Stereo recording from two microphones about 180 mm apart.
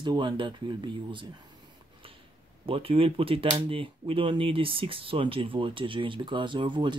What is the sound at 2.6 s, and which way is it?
Speech, 30° right (ahead or behind).